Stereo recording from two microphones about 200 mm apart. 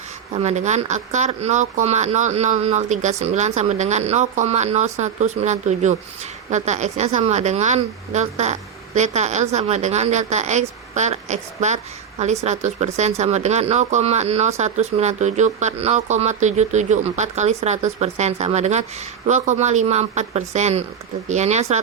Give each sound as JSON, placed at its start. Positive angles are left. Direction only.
{"t": 0.3, "sound": "speech", "side_deg": -35}